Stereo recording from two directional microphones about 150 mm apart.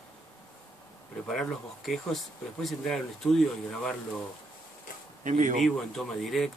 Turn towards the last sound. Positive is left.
turn(degrees=0)  # may be behind; listen again after turning